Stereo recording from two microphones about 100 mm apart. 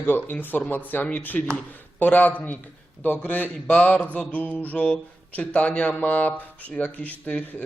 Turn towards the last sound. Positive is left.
turn(degrees=15)  # may be behind; listen again after turning